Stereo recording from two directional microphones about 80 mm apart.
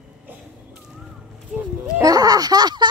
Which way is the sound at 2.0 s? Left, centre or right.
Right.